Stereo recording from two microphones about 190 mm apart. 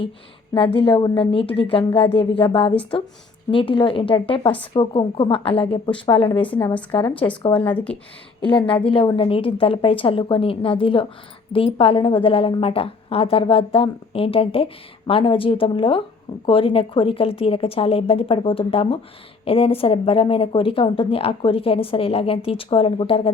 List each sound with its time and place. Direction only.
0.5 s a woman's voice: 30° left (ahead or behind)
7.6 s speech: 10° left (ahead or behind)
8.4 s a woman's voice: 30° left (ahead or behind)